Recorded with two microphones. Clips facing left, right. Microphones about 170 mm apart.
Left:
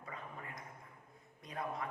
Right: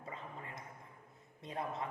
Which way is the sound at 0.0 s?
25° right (ahead or behind).